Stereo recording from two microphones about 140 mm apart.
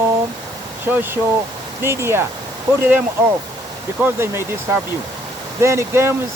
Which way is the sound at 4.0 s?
20° right (ahead or behind).